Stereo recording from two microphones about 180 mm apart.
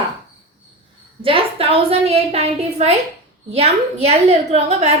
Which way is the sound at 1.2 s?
30° right (ahead or behind).